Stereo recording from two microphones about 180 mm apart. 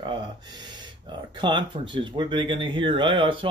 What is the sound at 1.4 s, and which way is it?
Speech, 25° right (ahead or behind).